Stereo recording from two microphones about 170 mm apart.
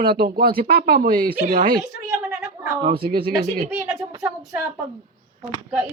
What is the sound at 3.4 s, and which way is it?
Speech, 50° right (ahead or behind).